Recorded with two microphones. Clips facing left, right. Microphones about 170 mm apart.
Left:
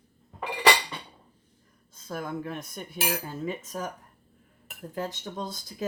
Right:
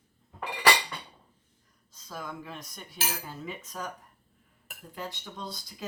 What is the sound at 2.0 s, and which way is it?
Speech, 55° left (ahead or behind).